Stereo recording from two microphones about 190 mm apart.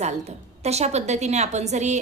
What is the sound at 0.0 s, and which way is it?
A woman's voice, 35° right (ahead or behind).